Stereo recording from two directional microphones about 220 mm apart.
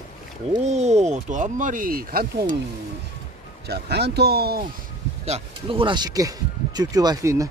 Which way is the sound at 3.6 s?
50° right (ahead or behind).